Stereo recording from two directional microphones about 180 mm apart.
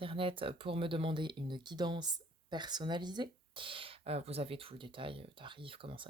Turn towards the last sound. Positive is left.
turn(degrees=-30)  # may be behind; listen again after turning